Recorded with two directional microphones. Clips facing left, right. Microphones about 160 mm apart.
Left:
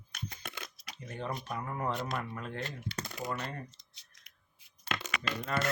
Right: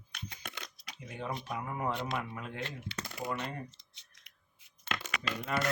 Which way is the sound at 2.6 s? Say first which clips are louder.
Left 1 dB; 40° left (ahead or behind).